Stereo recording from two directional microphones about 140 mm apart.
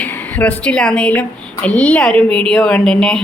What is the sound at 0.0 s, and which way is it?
A woman's voice, 10° left (ahead or behind).